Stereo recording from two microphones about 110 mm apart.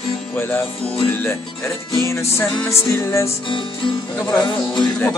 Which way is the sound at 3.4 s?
50° left (ahead or behind).